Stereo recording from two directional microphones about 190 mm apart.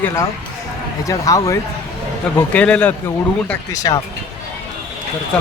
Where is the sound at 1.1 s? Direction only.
15° left (ahead or behind).